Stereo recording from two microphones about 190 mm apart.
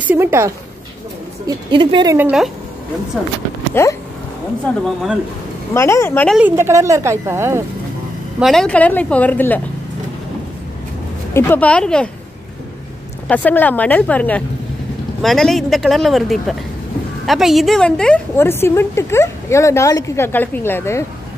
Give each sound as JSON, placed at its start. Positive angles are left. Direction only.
{"t": 0.0, "sound": "speech", "side_deg": -10}
{"t": 1.7, "sound": "speech", "side_deg": -25}
{"t": 2.1, "sound": "speech", "side_deg": -5}
{"t": 3.8, "sound": "a woman's voice", "side_deg": 10}
{"t": 6.3, "sound": "a woman's voice", "side_deg": -10}
{"t": 8.4, "sound": "a woman's voice", "side_deg": 0}
{"t": 11.3, "sound": "a woman's voice", "side_deg": 10}
{"t": 13.3, "sound": "a woman's voice", "side_deg": 10}